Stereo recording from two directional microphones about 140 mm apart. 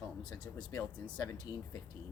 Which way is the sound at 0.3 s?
30° left (ahead or behind).